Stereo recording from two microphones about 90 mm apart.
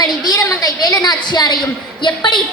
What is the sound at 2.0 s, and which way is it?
Speech, 60° left (ahead or behind).